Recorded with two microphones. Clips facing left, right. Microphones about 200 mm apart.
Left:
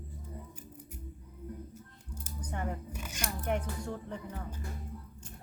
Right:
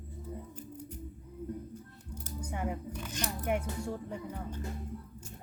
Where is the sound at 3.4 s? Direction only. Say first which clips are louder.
Right 1 dB; 10° right (ahead or behind).